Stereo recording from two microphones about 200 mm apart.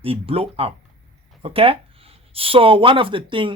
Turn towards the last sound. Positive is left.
turn(degrees=-25)  # may be behind; listen again after turning